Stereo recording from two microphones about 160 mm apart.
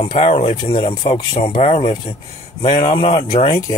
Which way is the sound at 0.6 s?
25° left (ahead or behind).